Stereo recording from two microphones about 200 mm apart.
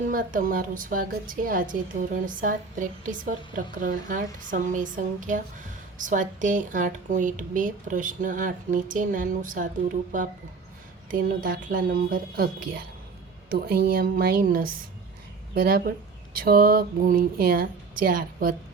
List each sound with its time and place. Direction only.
0.1 s a woman's voice: 45° right (ahead or behind)
11.1 s a woman's voice: 45° right (ahead or behind)